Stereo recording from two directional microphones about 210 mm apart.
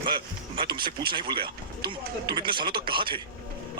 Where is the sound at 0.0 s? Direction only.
25° right (ahead or behind).